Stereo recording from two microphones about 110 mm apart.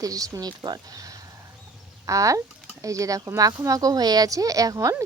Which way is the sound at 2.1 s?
30° right (ahead or behind).